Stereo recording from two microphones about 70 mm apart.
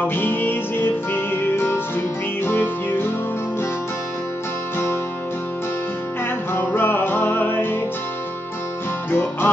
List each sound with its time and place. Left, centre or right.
0.0 s music: left
6.5 s music: left
9.1 s music: left